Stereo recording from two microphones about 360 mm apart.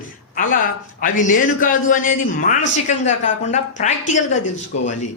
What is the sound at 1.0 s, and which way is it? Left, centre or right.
A man's voice, left.